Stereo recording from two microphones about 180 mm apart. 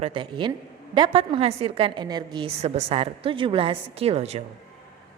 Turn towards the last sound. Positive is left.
turn(degrees=-35)  # may be behind; listen again after turning